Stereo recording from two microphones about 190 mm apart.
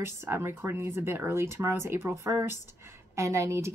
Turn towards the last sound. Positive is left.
turn(degrees=-15)  # may be behind; listen again after turning